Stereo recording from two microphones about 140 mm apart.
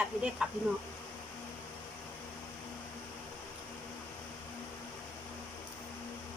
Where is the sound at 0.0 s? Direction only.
5° right (ahead or behind).